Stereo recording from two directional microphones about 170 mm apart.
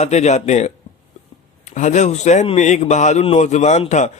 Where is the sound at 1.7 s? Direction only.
45° left (ahead or behind).